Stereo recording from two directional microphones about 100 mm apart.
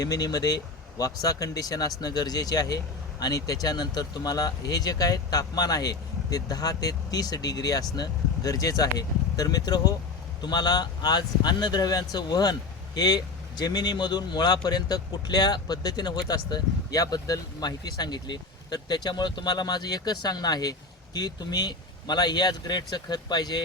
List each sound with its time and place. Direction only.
0.0 s speech: 40° left (ahead or behind)